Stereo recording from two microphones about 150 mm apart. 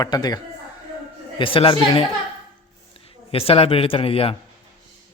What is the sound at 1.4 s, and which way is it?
Speech, 35° left (ahead or behind).